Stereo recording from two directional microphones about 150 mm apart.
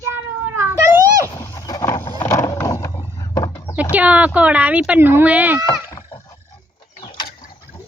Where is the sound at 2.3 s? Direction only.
20° left (ahead or behind).